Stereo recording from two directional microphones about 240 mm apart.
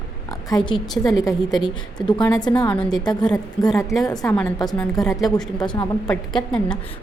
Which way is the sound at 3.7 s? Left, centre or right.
Centre.